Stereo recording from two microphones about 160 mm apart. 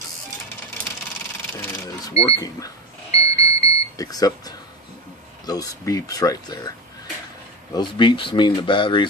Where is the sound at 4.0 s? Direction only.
20° left (ahead or behind).